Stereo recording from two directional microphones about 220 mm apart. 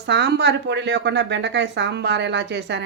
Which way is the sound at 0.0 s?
50° right (ahead or behind).